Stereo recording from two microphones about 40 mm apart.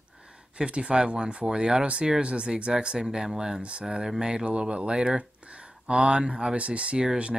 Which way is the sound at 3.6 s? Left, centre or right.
Right.